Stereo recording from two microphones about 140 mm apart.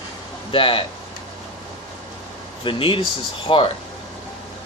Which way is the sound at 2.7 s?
35° left (ahead or behind).